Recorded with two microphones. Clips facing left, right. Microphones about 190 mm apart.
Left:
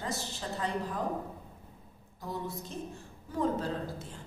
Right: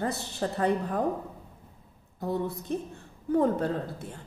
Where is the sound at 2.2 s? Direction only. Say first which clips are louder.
Right 7 dB; 60° right (ahead or behind).